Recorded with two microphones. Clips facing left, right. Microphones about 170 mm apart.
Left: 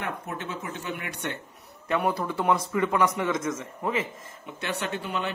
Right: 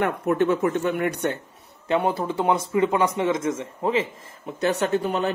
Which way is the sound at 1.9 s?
25° right (ahead or behind).